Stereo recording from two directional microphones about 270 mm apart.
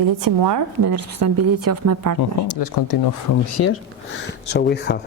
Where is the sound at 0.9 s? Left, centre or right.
Right.